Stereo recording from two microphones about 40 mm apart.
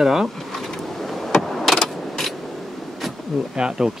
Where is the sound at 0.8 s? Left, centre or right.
Centre.